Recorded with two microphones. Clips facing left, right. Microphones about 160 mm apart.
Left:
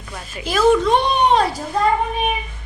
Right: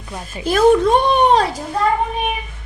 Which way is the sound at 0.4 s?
50° right (ahead or behind).